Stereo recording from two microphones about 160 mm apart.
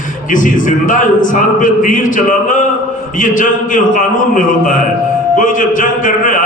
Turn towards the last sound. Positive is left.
turn(degrees=55)  # may be behind; listen again after turning